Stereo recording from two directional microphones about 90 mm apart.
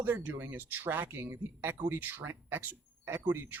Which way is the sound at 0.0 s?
20° right (ahead or behind).